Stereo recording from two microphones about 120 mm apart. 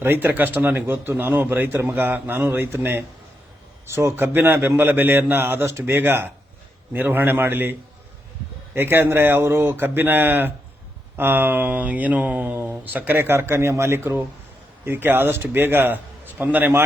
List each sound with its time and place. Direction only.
0.0 s speech: 20° right (ahead or behind)